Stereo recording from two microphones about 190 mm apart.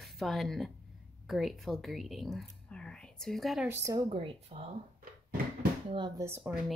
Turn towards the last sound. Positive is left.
turn(degrees=-10)  # may be behind; listen again after turning